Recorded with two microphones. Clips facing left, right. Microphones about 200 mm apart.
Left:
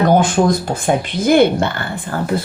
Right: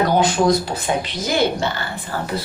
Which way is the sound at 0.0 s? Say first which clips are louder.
Left 3 dB; 50° left (ahead or behind).